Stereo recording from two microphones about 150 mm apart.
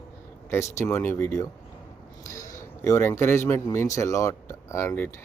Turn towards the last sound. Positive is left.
turn(degrees=15)  # may be behind; listen again after turning